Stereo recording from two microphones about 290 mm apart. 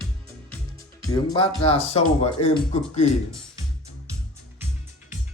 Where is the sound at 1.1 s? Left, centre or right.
Centre.